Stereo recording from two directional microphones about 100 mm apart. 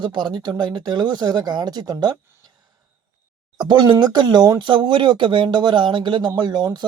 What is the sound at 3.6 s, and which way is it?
Speech, 50° right (ahead or behind).